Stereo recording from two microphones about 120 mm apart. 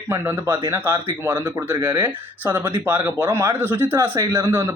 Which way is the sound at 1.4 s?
30° right (ahead or behind).